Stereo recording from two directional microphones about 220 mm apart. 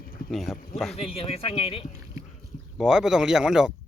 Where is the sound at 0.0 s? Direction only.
40° left (ahead or behind).